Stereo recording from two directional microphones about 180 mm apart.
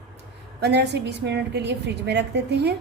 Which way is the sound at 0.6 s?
65° right (ahead or behind).